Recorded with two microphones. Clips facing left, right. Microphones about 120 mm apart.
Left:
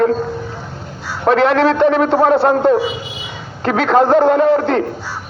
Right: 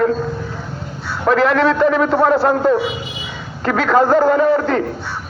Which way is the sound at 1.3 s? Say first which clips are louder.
Left 2 dB; 70° left (ahead or behind).